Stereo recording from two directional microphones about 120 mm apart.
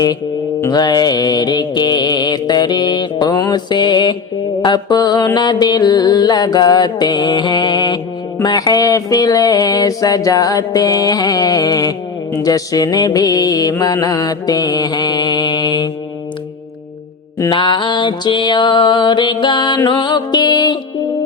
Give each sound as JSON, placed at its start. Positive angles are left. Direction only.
{"t": 0.7, "sound": "mantra", "side_deg": 35}
{"t": 17.5, "sound": "mantra", "side_deg": 40}